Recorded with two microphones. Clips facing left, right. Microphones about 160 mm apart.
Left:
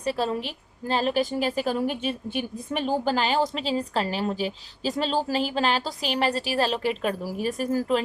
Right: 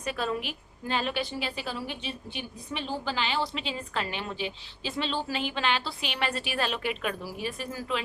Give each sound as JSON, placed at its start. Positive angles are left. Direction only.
{"t": 0.0, "sound": "a woman's voice", "side_deg": 35}